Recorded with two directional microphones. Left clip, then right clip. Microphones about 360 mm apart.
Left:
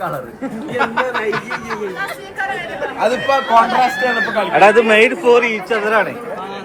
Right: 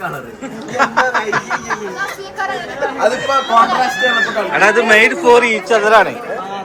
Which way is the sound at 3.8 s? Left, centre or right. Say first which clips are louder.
Right 2 dB; centre.